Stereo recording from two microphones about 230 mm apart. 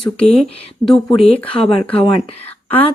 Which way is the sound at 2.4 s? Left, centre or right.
Centre.